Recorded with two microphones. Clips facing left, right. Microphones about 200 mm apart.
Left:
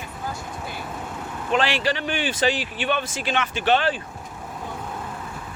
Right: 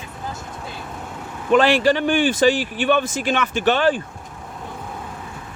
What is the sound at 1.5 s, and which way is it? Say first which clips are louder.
Speech: right 7 dB; 50° right (ahead or behind).